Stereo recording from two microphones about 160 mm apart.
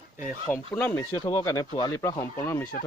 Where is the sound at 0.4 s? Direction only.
15° left (ahead or behind).